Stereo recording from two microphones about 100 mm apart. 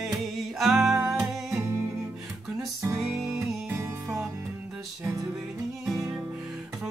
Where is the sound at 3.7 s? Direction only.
25° right (ahead or behind).